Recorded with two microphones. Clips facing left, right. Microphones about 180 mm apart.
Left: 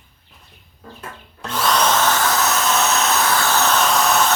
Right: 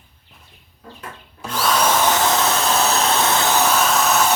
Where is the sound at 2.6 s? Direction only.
35° right (ahead or behind); by 4.3 s 5° right (ahead or behind).